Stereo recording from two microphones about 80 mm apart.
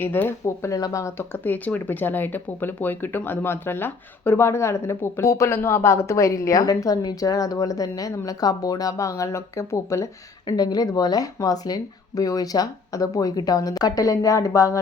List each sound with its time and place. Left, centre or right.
0.0 s speech: left
10.4 s speech: left